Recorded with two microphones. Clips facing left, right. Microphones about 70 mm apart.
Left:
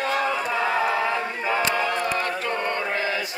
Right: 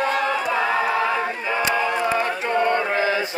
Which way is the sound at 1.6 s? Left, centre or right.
Centre.